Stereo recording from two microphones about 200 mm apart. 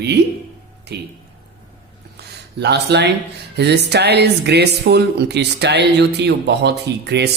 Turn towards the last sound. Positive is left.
turn(degrees=-55)  # may be behind; listen again after turning